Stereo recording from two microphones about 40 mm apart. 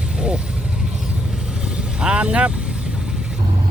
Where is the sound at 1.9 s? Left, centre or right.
Right.